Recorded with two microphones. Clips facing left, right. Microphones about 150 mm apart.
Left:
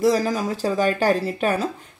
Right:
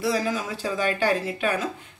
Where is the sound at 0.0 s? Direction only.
40° left (ahead or behind).